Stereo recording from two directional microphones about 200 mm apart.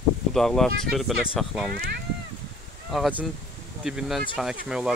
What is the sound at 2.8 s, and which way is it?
Speech, centre (ahead or behind).